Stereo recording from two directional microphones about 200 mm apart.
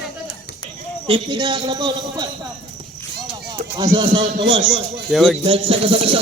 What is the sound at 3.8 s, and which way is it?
Speech, 25° right (ahead or behind).